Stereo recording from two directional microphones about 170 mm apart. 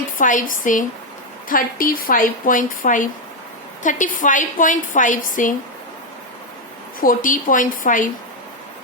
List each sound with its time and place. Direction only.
0.2 s a woman's voice: 50° left (ahead or behind)
7.0 s a woman's voice: 55° left (ahead or behind)